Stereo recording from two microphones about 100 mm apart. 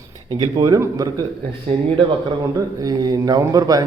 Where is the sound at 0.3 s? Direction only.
40° right (ahead or behind).